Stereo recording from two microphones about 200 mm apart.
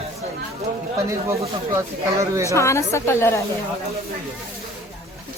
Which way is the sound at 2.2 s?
15° right (ahead or behind).